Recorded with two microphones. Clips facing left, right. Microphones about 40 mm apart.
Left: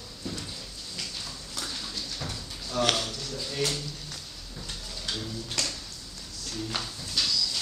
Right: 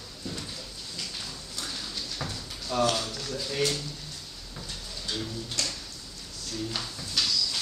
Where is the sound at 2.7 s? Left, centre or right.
Centre.